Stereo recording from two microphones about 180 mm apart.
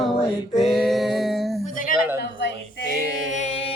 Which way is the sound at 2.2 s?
65° left (ahead or behind).